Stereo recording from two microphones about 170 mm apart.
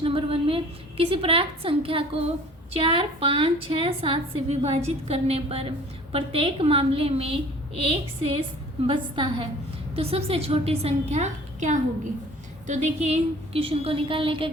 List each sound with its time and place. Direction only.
0.0 s a woman's voice: 30° right (ahead or behind)